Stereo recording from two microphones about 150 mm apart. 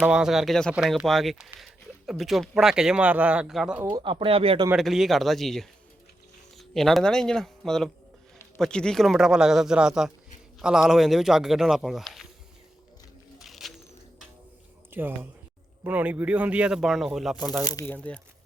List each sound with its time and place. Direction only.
0.0 s speech: 5° right (ahead or behind)
3.9 s speech: 35° right (ahead or behind)
4.8 s speech: centre (ahead or behind)
13.4 s a sound: centre (ahead or behind)
14.8 s speech: 15° right (ahead or behind)
17.6 s speech: 20° left (ahead or behind)
17.9 s speech: 10° left (ahead or behind)